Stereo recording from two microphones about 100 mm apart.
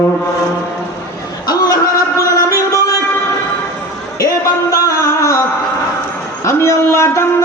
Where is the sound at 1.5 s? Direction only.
40° left (ahead or behind).